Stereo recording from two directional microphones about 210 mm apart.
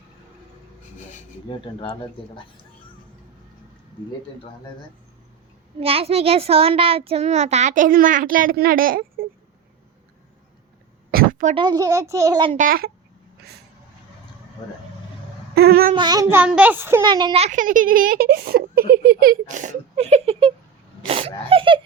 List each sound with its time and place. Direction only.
1.5 s speech: 25° left (ahead or behind)
5.8 s a child's voice: 25° right (ahead or behind); by 9.2 s 45° right (ahead or behind)
11.1 s a sound: 45° right (ahead or behind)
11.5 s a child's voice: 20° right (ahead or behind)
12.5 s a child's voice: 45° right (ahead or behind)
15.5 s a sound: 50° right (ahead or behind)
16.0 s a child's voice: 20° right (ahead or behind)
17.0 s a child's voice: 20° right (ahead or behind)
21.0 s sneeze: 25° right (ahead or behind)